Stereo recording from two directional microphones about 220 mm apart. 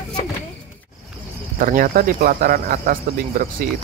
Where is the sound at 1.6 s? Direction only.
40° right (ahead or behind).